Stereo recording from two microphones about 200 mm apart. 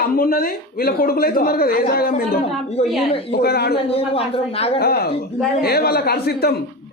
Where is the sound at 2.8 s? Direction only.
30° left (ahead or behind).